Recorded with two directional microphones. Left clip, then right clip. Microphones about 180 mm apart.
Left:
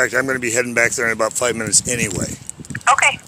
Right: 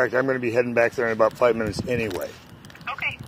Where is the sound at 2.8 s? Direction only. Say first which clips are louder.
Left 15 dB; 45° left (ahead or behind).